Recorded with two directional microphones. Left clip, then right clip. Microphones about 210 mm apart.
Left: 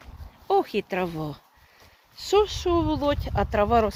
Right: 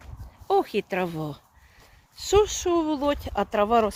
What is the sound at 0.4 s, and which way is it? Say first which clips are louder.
Speech: even; 15° right (ahead or behind).